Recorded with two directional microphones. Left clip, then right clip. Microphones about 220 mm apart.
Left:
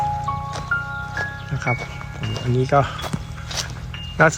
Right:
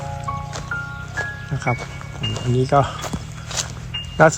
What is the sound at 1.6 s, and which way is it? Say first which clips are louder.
Speech: even; 5° right (ahead or behind).